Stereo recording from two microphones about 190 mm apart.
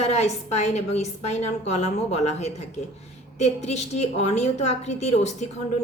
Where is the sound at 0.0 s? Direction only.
35° left (ahead or behind).